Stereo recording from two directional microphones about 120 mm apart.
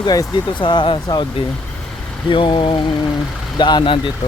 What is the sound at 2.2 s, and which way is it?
Speech, 45° left (ahead or behind).